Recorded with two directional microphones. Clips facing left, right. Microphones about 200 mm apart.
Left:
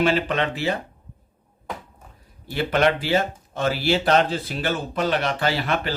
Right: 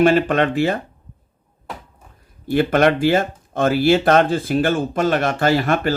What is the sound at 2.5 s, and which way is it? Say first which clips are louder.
Speech: right 5 dB; 50° right (ahead or behind).